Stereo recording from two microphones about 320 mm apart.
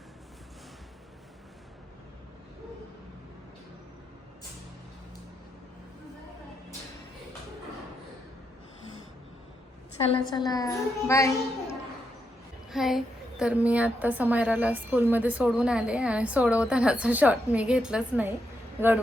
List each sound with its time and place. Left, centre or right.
10.0 s a woman's voice: centre
12.7 s a woman's voice: centre